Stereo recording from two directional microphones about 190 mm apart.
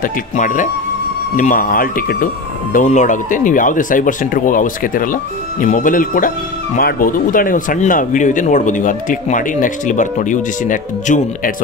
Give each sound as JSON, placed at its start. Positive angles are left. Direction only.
{"t": 0.0, "sound": "speech", "side_deg": 40}